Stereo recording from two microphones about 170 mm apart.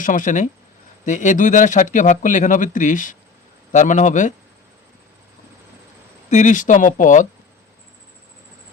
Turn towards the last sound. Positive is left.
turn(degrees=50)  # may be behind; listen again after turning